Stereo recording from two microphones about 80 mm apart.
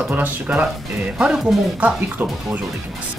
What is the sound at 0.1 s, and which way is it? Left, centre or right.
Speech, centre.